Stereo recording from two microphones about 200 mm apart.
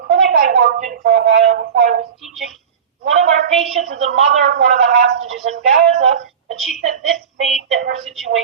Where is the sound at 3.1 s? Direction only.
35° right (ahead or behind).